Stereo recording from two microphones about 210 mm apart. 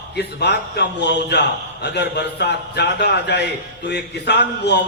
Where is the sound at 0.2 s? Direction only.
55° left (ahead or behind).